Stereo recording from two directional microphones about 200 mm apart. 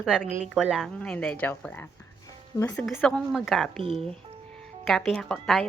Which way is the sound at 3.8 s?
25° right (ahead or behind).